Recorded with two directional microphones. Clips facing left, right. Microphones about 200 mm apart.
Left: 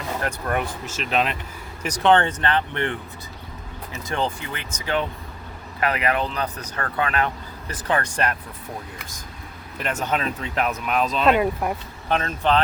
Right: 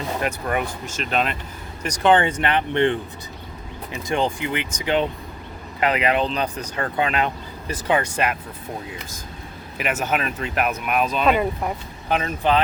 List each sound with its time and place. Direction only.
0.2 s speech: 5° right (ahead or behind)
9.7 s speech: 5° right (ahead or behind)